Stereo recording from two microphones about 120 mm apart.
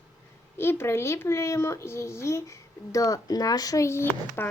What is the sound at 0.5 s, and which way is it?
Speech, 20° left (ahead or behind).